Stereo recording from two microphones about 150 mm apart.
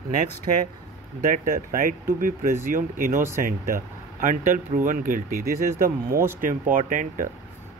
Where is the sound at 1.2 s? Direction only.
70° right (ahead or behind).